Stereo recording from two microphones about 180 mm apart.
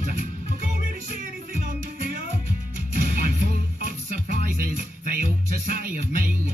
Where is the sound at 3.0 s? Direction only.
55° right (ahead or behind).